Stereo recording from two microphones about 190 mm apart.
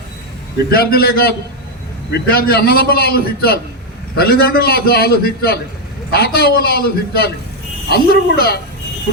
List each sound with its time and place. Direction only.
0.7 s a man's voice: 55° left (ahead or behind)